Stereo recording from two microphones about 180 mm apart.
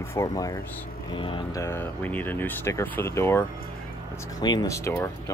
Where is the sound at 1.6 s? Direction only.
10° left (ahead or behind).